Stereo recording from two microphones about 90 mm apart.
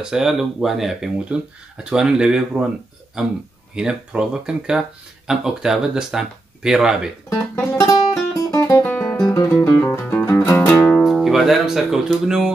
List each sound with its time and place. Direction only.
0.0 s speech: 5° right (ahead or behind)
7.7 s music: 35° left (ahead or behind)
8.8 s guitar: 15° left (ahead or behind)
9.3 s music: 30° left (ahead or behind)
11.0 s music: centre (ahead or behind)